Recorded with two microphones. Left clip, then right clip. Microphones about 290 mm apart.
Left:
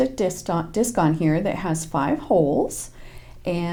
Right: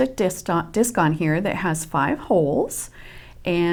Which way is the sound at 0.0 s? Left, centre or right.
Right.